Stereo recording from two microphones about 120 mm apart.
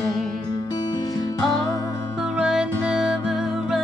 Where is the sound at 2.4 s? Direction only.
5° right (ahead or behind).